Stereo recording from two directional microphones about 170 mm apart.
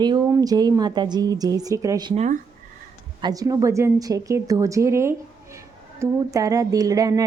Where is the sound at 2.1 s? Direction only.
45° right (ahead or behind).